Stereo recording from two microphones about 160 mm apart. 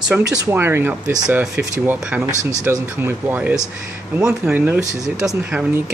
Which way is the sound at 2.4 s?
20° right (ahead or behind).